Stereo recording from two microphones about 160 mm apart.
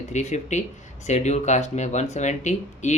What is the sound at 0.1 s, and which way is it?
Speech, 45° left (ahead or behind).